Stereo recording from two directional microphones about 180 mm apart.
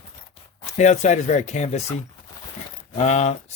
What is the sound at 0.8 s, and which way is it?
Speech, 40° left (ahead or behind).